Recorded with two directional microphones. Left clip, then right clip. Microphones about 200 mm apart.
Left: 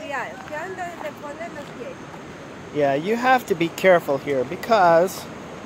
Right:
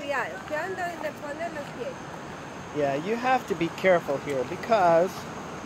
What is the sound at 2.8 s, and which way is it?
Speech, 40° left (ahead or behind).